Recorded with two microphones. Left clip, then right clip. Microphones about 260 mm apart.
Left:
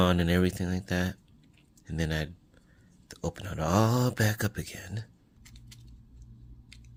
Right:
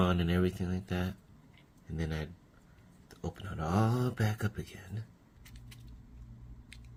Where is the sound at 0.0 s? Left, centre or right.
Left.